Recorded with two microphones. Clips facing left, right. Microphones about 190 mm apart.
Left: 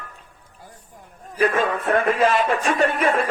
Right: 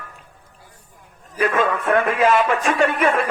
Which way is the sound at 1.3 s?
35° left (ahead or behind).